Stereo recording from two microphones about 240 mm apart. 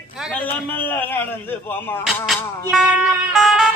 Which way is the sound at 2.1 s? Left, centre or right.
Centre.